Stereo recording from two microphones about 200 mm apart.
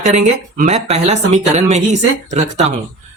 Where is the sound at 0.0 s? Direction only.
40° right (ahead or behind).